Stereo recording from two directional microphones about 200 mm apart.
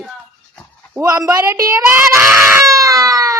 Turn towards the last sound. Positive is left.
turn(degrees=-15)  # may be behind; listen again after turning